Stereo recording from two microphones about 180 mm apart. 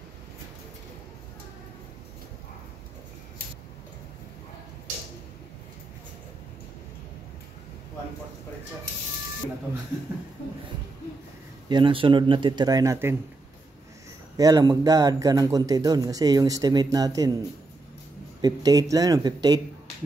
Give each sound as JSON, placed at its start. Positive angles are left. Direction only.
{"t": 11.7, "sound": "speech", "side_deg": -30}
{"t": 14.3, "sound": "speech", "side_deg": -20}
{"t": 18.4, "sound": "speech", "side_deg": -20}